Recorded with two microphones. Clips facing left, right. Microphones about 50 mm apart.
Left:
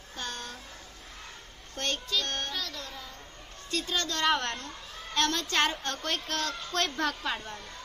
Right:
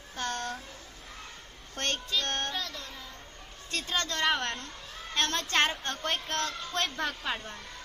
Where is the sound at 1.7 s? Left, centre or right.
Right.